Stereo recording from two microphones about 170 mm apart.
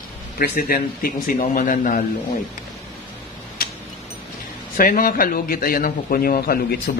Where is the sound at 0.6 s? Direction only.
60° left (ahead or behind).